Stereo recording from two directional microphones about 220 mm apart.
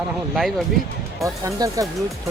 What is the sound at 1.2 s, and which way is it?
Speech, 15° right (ahead or behind).